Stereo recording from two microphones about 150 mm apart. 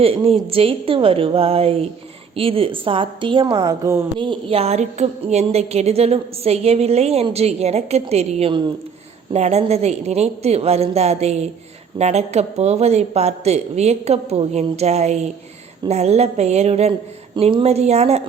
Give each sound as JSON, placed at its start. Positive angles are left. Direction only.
{"t": 0.0, "sound": "a woman's voice", "side_deg": -40}
{"t": 9.3, "sound": "a woman's voice", "side_deg": -45}